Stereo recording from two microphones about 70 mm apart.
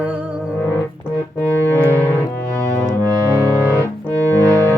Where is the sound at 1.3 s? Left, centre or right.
Left.